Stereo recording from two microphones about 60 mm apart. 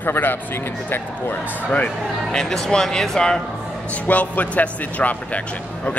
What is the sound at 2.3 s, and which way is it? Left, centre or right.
Speech, centre.